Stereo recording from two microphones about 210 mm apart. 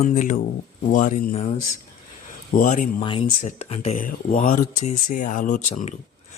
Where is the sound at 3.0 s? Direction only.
25° left (ahead or behind).